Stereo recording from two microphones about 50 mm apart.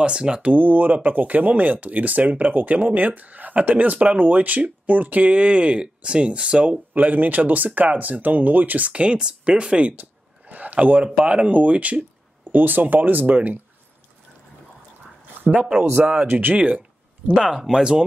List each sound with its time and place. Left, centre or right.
0.0 s speech: centre
0.5 s speech: right
7.0 s speech: right
10.5 s a sound: right
11.1 s speech: right
12.4 s speech: right
16.3 s speech: right
16.5 s speech: right
17.4 s speech: centre